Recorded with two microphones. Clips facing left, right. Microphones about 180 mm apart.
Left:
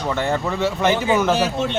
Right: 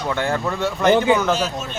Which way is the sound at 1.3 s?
65° left (ahead or behind).